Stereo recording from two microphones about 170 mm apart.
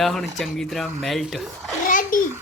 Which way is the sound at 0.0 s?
Centre (ahead or behind).